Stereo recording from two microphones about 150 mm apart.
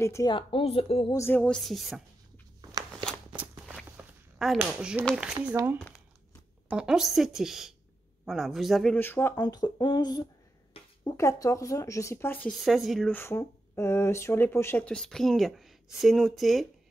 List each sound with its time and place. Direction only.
0.0 s speech: 20° left (ahead or behind)
0.3 s speech: 35° left (ahead or behind)
1.1 s a woman's voice: 15° left (ahead or behind)
3.9 s a sound: 5° right (ahead or behind)
5.1 s speech: 5° right (ahead or behind)
6.7 s a woman's voice: 5° right (ahead or behind); by 9.3 s 15° left (ahead or behind)
9.4 s speech: 25° left (ahead or behind)
10.8 s a sound: 40° left (ahead or behind)
11.1 s speech: 20° left (ahead or behind)
12.4 s a woman's voice: centre (ahead or behind)
13.1 s speech: 15° left (ahead or behind); by 16.6 s centre (ahead or behind)